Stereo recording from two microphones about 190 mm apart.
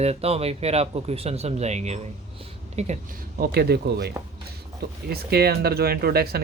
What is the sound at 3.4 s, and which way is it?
Speech, 55° right (ahead or behind).